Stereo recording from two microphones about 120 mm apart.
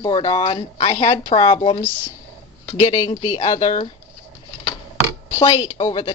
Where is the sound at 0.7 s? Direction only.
60° left (ahead or behind).